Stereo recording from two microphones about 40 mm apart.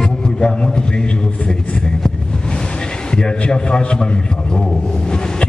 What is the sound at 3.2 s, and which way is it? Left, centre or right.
Speech, left.